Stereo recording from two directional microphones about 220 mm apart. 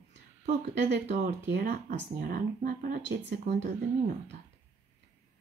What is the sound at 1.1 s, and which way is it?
Speech, 45° right (ahead or behind).